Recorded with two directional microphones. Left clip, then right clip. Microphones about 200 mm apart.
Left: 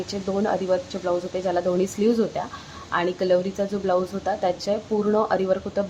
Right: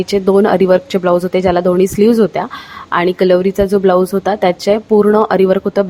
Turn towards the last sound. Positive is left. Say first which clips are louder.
# right 12 dB
turn(degrees=-40)  # may be behind; listen again after turning